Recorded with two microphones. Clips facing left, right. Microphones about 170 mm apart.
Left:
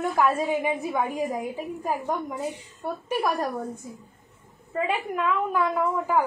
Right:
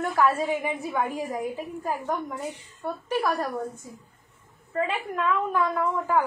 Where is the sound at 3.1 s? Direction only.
15° left (ahead or behind).